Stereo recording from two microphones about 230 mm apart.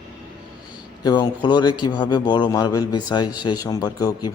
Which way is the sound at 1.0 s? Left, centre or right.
Centre.